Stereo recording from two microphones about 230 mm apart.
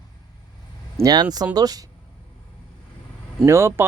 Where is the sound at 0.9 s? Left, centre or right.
Centre.